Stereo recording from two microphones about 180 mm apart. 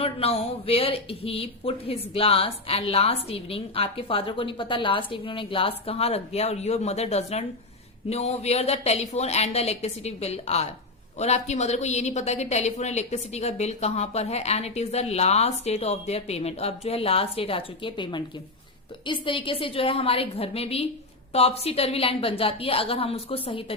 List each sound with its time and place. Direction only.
0.0 s speech: 35° left (ahead or behind)